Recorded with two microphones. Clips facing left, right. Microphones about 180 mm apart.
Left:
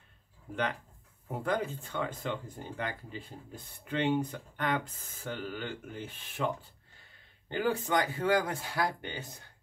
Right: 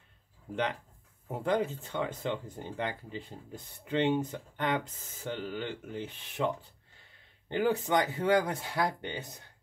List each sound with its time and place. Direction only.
1.4 s speech: 25° right (ahead or behind)